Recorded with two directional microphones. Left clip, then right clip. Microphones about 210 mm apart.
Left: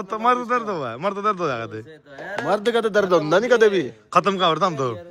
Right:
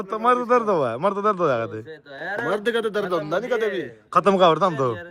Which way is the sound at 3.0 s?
50° left (ahead or behind).